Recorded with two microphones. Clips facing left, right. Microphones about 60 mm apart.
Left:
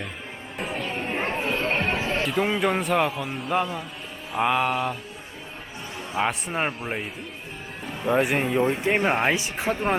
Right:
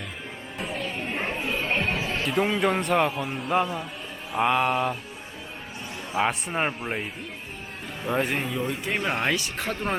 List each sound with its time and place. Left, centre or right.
0.8 s music: left
1.1 s chatter: centre
1.7 s chatter: left
2.2 s a man's voice: centre
6.1 s a man's voice: centre
8.0 s speech: centre
8.4 s speech: left; by 9.9 s centre